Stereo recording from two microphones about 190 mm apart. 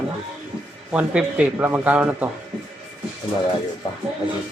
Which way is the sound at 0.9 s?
5° right (ahead or behind).